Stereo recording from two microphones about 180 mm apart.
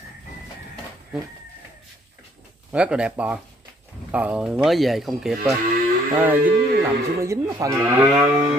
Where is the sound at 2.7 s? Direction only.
5° right (ahead or behind).